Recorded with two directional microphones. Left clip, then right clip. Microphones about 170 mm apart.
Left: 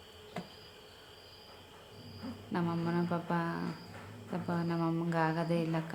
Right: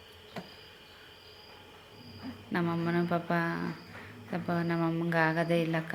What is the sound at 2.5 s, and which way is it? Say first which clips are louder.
A woman's voice: right 4 dB; 10° right (ahead or behind).